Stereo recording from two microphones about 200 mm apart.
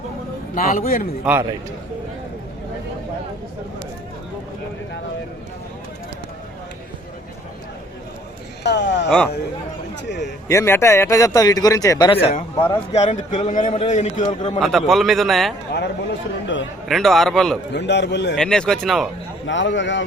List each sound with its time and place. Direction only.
0.5 s a man's voice: 45° left (ahead or behind)
1.2 s a man's voice: 10° right (ahead or behind)
8.6 s a man's voice: 60° left (ahead or behind)
9.0 s a man's voice: 5° left (ahead or behind)
10.5 s a man's voice: 15° left (ahead or behind); by 14.6 s 35° left (ahead or behind)
14.6 s a man's voice: centre (ahead or behind)
16.9 s a man's voice: centre (ahead or behind)
17.7 s a man's voice: 60° left (ahead or behind)
18.3 s a man's voice: 5° left (ahead or behind)
19.5 s a man's voice: 65° left (ahead or behind)